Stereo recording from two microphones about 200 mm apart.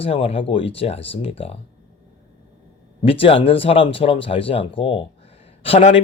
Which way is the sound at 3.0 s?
25° left (ahead or behind).